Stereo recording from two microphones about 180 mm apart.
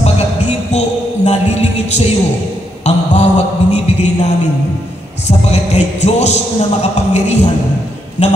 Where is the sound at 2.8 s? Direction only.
40° left (ahead or behind).